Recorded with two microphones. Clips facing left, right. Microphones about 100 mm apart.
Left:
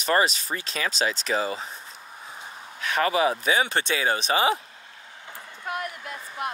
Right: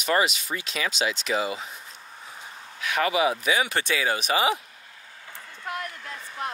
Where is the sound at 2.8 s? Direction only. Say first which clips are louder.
Left 1 dB; 40° left (ahead or behind).